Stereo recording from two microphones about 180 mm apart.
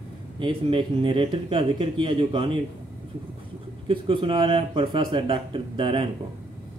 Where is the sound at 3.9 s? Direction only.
25° right (ahead or behind).